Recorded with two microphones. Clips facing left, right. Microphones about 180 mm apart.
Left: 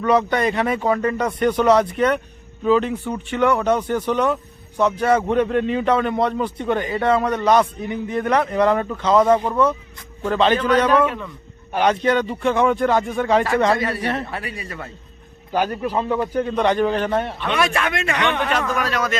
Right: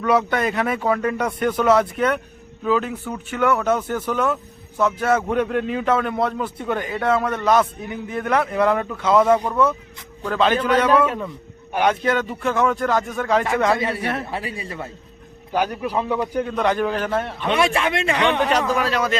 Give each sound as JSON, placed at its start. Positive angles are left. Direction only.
{"t": 0.0, "sound": "a man's voice", "side_deg": -5}
{"t": 13.7, "sound": "a man's voice", "side_deg": -25}
{"t": 14.0, "sound": "a man's voice", "side_deg": 0}
{"t": 14.3, "sound": "a man's voice", "side_deg": -25}
{"t": 15.5, "sound": "a man's voice", "side_deg": -5}
{"t": 17.5, "sound": "a man's voice", "side_deg": -30}